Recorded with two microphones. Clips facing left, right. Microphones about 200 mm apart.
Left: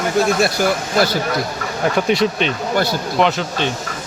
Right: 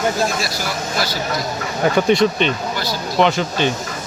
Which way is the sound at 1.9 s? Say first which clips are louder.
Right 2 dB; 5° left (ahead or behind).